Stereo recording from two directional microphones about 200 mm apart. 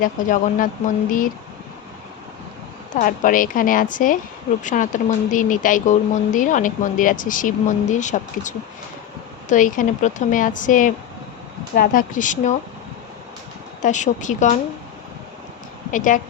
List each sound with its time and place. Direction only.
0.0 s a woman's voice: 45° left (ahead or behind)
2.9 s a woman's voice: 40° left (ahead or behind)
13.8 s speech: 40° left (ahead or behind)
15.9 s speech: 40° left (ahead or behind)